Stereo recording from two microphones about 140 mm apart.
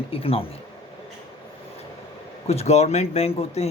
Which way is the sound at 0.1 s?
45° left (ahead or behind).